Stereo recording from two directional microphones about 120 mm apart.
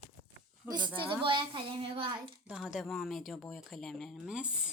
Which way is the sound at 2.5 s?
5° right (ahead or behind).